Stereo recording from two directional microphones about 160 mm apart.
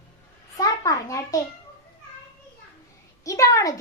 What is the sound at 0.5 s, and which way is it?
Speech, 20° left (ahead or behind).